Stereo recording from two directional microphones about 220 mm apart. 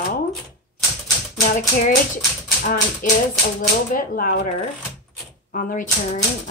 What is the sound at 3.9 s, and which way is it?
Speech, 40° left (ahead or behind).